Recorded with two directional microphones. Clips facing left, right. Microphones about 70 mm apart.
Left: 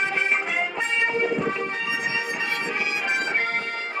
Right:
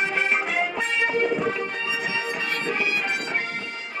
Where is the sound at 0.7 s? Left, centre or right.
Centre.